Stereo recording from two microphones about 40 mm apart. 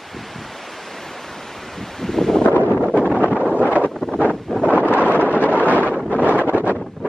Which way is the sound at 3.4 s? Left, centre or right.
Right.